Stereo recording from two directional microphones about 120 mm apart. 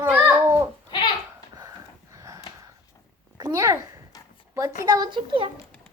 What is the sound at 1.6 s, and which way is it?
Wheeze, 30° right (ahead or behind).